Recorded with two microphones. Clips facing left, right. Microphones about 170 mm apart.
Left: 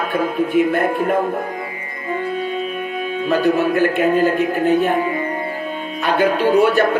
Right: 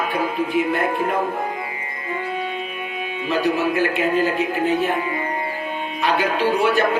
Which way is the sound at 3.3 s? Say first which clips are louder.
Left 4 dB; 45° left (ahead or behind).